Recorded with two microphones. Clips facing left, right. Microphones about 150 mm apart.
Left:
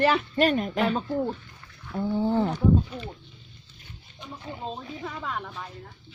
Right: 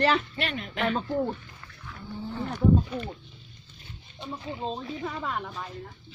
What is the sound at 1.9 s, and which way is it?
Wild animals, 80° left.